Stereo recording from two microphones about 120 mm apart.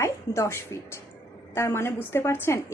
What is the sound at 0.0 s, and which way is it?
A woman's voice, 25° left (ahead or behind).